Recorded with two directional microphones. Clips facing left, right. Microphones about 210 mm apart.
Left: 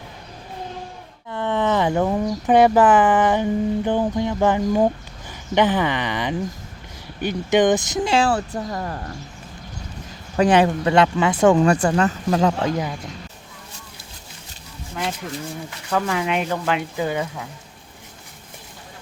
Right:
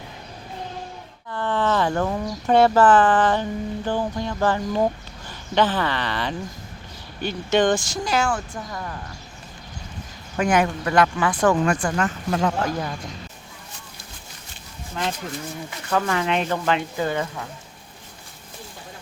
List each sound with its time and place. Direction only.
1.3 s speech: 20° left (ahead or behind); by 9.1 s 40° left (ahead or behind)
10.3 s speech: 30° left (ahead or behind)
12.7 s speech: 10° left (ahead or behind)
15.9 s speech: 5° left (ahead or behind)